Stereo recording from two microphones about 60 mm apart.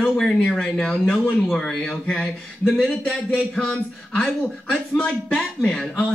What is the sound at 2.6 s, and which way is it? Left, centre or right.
A man's voice, centre.